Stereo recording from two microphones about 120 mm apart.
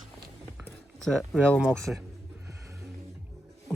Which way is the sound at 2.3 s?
25° right (ahead or behind).